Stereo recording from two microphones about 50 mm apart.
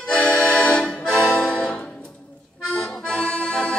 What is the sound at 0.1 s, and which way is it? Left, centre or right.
Accordion, centre.